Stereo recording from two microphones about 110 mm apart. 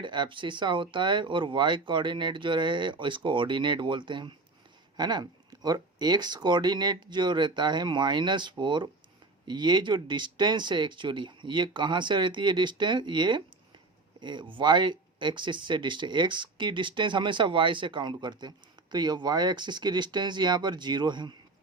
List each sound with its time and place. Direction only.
0.0 s speech: 45° right (ahead or behind)